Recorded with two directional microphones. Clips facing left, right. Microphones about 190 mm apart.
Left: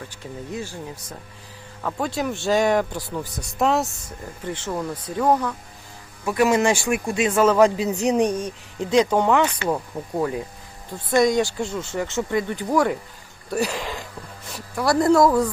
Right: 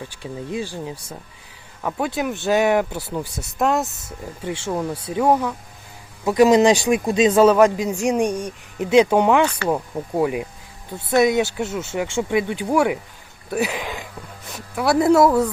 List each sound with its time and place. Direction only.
0.2 s speech: 15° right (ahead or behind)
4.4 s speech: 10° right (ahead or behind)
13.5 s a sound: centre (ahead or behind)
14.5 s speech: 5° right (ahead or behind)